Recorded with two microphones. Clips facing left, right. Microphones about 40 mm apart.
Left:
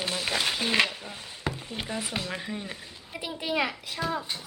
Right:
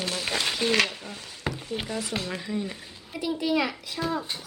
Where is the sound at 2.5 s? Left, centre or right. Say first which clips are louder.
Right 5 dB; centre.